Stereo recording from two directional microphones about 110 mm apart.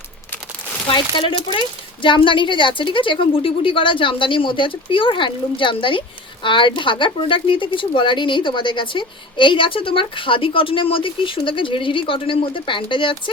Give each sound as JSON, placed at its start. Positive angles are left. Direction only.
{"t": 0.9, "sound": "speech", "side_deg": 45}